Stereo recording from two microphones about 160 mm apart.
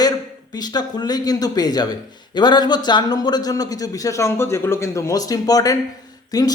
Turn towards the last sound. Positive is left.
turn(degrees=25)  # may be behind; listen again after turning